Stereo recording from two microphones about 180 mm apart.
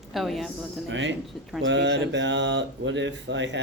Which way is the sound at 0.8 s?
90° right.